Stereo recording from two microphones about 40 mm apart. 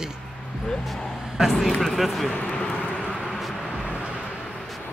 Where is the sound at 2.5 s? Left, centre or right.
Left.